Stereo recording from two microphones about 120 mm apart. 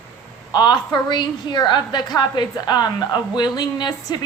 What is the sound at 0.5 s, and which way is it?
A woman's voice, 35° left (ahead or behind).